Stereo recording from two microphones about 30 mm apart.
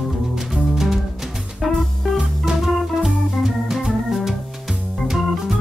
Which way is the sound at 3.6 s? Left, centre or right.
Centre.